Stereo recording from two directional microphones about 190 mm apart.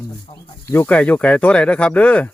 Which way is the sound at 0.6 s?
10° left (ahead or behind).